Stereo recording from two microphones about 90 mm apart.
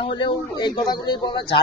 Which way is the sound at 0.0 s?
60° left (ahead or behind).